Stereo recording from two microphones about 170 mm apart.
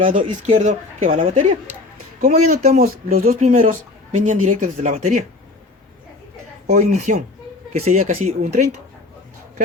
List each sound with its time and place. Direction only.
0.0 s speech: 45° right (ahead or behind)
2.8 s speech: 55° right (ahead or behind)
6.7 s speech: 45° right (ahead or behind)